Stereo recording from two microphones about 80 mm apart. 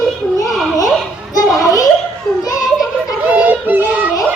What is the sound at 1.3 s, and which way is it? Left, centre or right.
Children playing, left.